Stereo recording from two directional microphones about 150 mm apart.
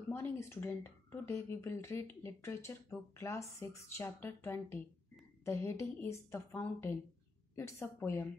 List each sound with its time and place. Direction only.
0.1 s speech: 15° left (ahead or behind)